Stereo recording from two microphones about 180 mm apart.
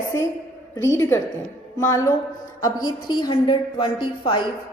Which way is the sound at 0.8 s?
15° left (ahead or behind).